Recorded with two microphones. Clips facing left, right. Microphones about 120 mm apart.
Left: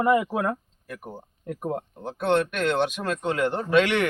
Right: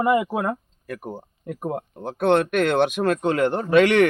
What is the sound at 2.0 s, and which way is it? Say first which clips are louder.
Speech: right 4 dB; 60° right (ahead or behind).